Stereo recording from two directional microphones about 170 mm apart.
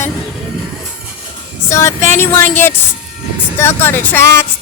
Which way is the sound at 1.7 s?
15° left (ahead or behind).